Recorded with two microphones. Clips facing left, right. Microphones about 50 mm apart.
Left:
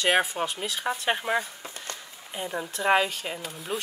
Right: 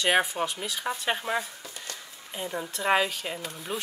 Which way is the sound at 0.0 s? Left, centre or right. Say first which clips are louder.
Left 1 dB; centre.